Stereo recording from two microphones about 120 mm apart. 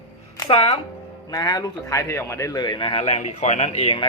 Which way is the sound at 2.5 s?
35° left (ahead or behind).